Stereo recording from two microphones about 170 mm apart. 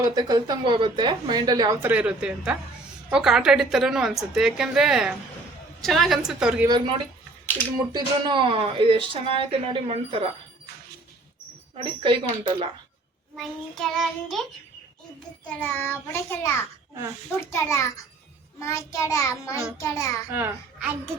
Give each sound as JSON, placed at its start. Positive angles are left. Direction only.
{"t": 0.0, "sound": "a woman's voice", "side_deg": -25}
{"t": 1.9, "sound": "a woman's voice", "side_deg": -5}
{"t": 6.7, "sound": "a woman's voice", "side_deg": -30}
{"t": 11.8, "sound": "a woman's voice", "side_deg": -30}
{"t": 13.3, "sound": "a woman's voice", "side_deg": 0}
{"t": 15.4, "sound": "a child's voice", "side_deg": 10}
{"t": 20.3, "sound": "a child's voice", "side_deg": -10}